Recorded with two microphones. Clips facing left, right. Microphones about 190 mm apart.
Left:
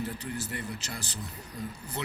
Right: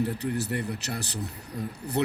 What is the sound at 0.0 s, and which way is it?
A man's voice, 65° right (ahead or behind).